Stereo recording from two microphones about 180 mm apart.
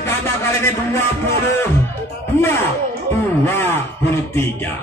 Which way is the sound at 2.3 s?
10° left (ahead or behind).